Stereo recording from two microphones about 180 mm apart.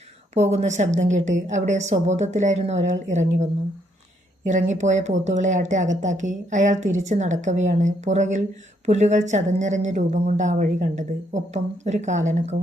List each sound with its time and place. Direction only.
0.3 s speech: 40° right (ahead or behind)